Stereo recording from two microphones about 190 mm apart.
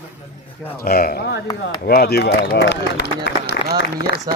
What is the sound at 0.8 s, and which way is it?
Speech, 50° left (ahead or behind).